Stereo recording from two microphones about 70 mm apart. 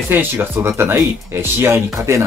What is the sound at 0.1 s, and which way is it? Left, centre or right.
Speech, right.